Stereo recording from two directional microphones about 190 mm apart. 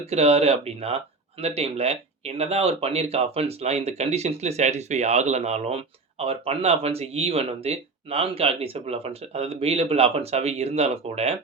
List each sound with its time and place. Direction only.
0.0 s speech: 35° right (ahead or behind)